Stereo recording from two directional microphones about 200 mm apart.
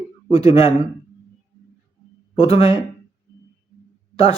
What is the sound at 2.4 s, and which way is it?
Speech, 30° left (ahead or behind).